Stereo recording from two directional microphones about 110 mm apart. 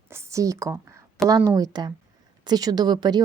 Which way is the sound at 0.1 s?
25° right (ahead or behind).